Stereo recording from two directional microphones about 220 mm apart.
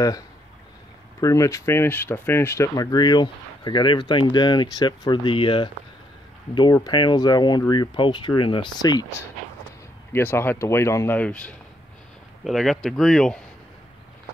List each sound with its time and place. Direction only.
1.2 s speech: 15° left (ahead or behind)
10.1 s speech: 10° left (ahead or behind)